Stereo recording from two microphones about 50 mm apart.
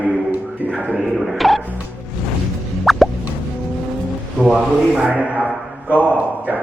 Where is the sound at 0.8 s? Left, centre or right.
Right.